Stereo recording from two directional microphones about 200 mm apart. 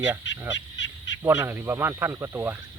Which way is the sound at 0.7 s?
65° left (ahead or behind).